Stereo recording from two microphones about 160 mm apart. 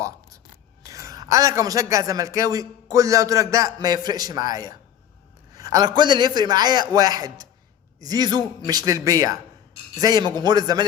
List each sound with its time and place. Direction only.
0.9 s a man's voice: 20° right (ahead or behind)